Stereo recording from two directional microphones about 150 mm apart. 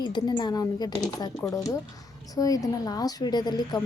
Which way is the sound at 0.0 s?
30° left (ahead or behind).